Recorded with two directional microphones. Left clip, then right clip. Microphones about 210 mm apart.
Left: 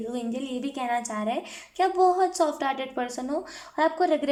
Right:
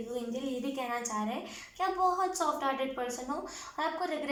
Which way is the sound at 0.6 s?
45° left (ahead or behind).